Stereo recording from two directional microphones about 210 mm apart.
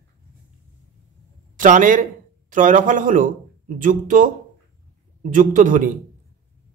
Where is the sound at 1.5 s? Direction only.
40° right (ahead or behind).